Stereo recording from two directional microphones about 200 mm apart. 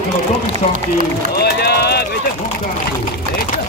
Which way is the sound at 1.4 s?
55° left (ahead or behind).